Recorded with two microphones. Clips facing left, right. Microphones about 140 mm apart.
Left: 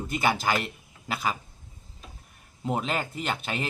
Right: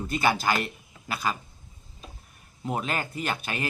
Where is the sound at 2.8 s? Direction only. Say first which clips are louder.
Right 1 dB; 25° left (ahead or behind).